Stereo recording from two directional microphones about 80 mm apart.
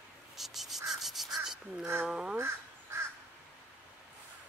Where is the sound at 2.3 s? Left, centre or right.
Right.